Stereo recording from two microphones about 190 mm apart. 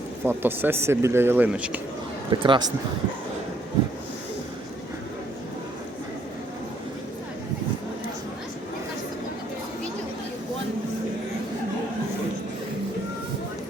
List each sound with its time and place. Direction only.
0.3 s speech: 10° right (ahead or behind)
2.3 s a man's voice: 25° right (ahead or behind)